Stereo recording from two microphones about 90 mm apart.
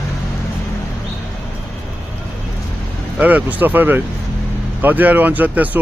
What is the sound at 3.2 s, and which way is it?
Speech, 20° right (ahead or behind).